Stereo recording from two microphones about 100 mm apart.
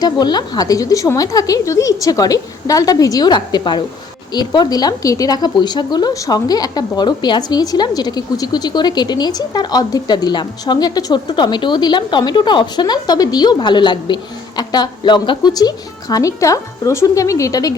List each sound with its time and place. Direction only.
0.0 s speech: 45° left (ahead or behind)